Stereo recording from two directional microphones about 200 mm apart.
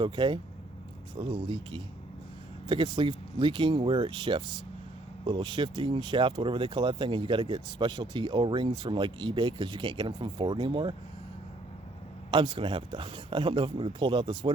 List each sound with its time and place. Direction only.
0.0 s speech: 25° right (ahead or behind)
12.3 s speech: 25° right (ahead or behind)